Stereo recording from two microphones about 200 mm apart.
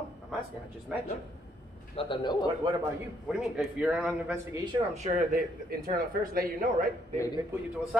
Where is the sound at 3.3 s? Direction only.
Centre (ahead or behind).